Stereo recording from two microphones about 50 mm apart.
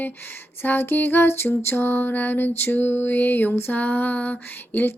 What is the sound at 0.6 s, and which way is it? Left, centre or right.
Music, left.